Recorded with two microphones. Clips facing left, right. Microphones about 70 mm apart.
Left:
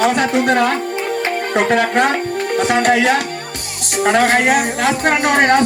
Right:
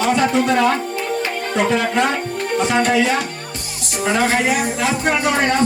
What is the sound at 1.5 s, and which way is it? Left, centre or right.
Speech, left.